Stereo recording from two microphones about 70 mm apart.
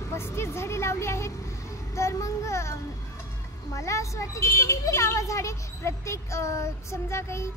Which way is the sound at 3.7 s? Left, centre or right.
Left.